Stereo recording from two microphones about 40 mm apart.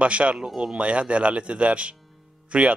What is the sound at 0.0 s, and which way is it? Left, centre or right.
A man's voice, right.